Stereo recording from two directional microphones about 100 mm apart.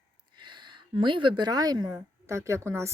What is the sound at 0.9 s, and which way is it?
Speech, 55° right (ahead or behind).